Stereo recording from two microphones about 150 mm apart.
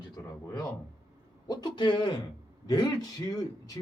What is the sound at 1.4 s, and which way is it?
A man's voice, 30° left (ahead or behind).